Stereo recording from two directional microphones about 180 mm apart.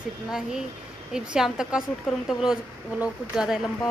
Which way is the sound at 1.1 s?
5° right (ahead or behind).